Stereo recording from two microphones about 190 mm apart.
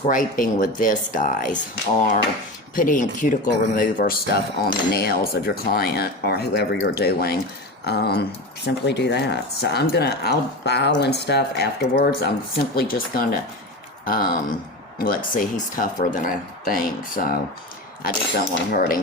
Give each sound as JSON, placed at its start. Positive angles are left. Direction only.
{"t": 0.0, "sound": "speech", "side_deg": 45}